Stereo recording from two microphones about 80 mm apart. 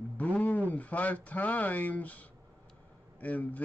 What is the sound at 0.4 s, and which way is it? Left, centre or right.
Speech, centre.